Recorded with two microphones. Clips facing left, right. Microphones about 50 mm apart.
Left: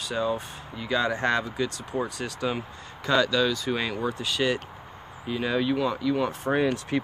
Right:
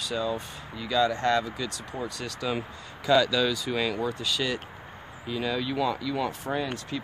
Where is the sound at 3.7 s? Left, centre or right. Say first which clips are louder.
Even; centre.